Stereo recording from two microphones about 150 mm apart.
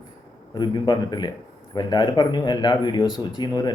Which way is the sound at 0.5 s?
30° left (ahead or behind).